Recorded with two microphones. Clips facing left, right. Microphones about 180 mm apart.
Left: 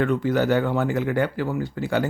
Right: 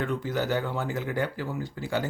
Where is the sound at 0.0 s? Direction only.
65° left (ahead or behind).